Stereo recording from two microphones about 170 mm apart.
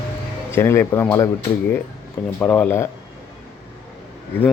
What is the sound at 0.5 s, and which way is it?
Speech, 15° left (ahead or behind).